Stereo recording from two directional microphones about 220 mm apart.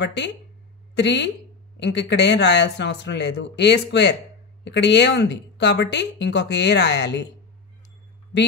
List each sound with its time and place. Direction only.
0.0 s a woman's voice: 50° left (ahead or behind)